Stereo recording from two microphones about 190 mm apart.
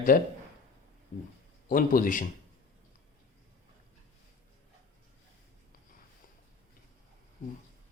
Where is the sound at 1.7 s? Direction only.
45° left (ahead or behind).